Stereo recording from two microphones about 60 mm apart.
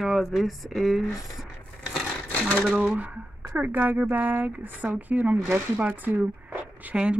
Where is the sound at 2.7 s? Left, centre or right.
Right.